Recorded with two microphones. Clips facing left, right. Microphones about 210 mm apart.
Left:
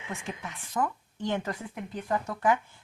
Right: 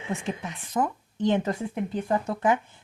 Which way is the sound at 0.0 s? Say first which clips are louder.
Right 6 dB; 25° right (ahead or behind).